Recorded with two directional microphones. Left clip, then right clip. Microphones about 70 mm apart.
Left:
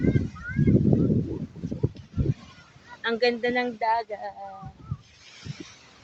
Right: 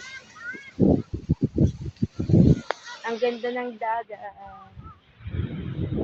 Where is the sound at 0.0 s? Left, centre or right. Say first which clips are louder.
Left 8 dB; right.